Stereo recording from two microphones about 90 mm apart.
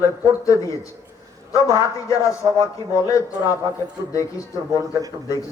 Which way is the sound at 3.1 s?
35° left (ahead or behind).